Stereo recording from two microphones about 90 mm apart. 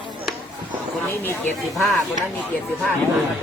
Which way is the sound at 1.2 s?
25° left (ahead or behind).